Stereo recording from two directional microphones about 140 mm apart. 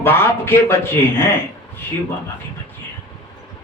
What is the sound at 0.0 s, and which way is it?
A man's voice, 15° left (ahead or behind).